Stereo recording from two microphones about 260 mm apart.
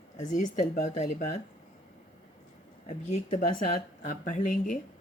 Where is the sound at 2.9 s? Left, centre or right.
Left.